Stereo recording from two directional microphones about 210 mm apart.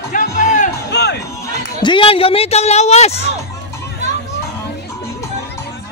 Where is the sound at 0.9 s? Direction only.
55° left (ahead or behind).